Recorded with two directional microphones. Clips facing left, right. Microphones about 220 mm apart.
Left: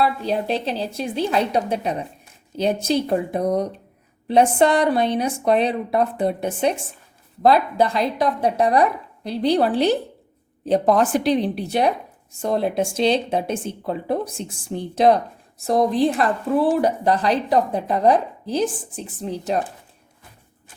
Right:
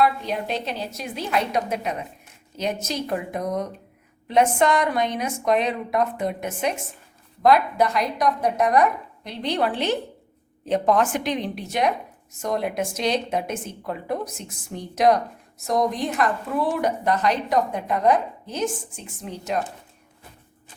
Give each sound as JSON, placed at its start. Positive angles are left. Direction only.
{"t": 0.0, "sound": "speech", "side_deg": 30}